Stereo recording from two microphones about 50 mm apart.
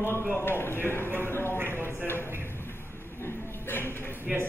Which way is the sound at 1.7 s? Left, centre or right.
Left.